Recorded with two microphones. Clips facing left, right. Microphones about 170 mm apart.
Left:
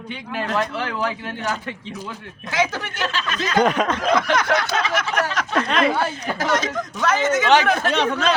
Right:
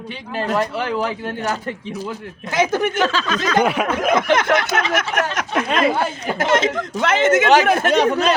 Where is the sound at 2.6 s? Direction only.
50° right (ahead or behind).